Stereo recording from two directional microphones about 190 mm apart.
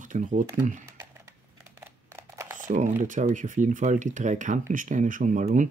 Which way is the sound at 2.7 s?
40° right (ahead or behind).